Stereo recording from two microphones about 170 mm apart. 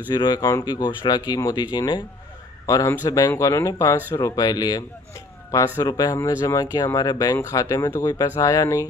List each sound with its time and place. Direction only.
0.1 s speech: 25° left (ahead or behind)